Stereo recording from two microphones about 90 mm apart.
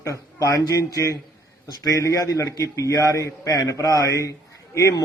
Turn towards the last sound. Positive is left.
turn(degrees=35)  # may be behind; listen again after turning